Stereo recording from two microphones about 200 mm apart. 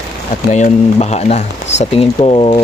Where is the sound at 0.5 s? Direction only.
35° left (ahead or behind).